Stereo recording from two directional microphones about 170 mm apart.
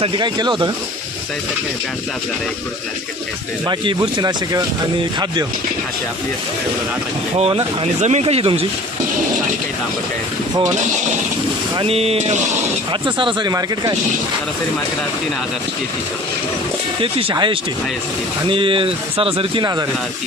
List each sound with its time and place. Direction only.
0.0 s speech: 25° right (ahead or behind)
3.7 s speech: 25° right (ahead or behind)
7.3 s speech: 35° right (ahead or behind)
11.8 s speech: 35° right (ahead or behind)
12.9 s speech: 30° right (ahead or behind)
17.0 s speech: 30° right (ahead or behind)